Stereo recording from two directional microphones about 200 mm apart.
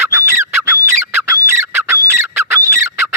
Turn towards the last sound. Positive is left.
turn(degrees=-15)  # may be behind; listen again after turning